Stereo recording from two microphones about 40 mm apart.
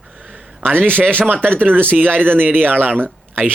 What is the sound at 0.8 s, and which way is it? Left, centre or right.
Speech, right.